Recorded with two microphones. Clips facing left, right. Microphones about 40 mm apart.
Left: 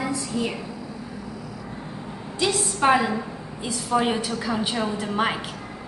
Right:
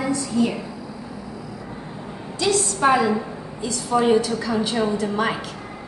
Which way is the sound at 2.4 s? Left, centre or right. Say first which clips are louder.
Right 3 dB; centre.